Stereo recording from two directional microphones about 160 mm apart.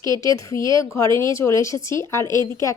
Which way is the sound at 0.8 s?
20° left (ahead or behind).